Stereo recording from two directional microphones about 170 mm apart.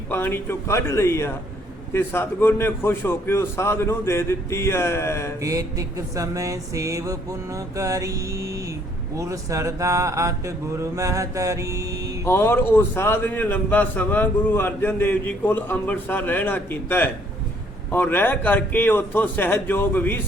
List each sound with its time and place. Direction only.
0.1 s a man's voice: 15° left (ahead or behind)
5.4 s a sound: 20° right (ahead or behind)
12.2 s a man's voice: 15° left (ahead or behind)